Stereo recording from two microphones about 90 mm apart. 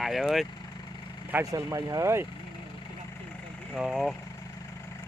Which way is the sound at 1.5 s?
40° right (ahead or behind).